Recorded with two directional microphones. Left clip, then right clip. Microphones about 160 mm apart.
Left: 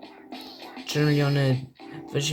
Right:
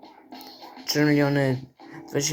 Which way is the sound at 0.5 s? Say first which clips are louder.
Right 3 dB; 15° left (ahead or behind).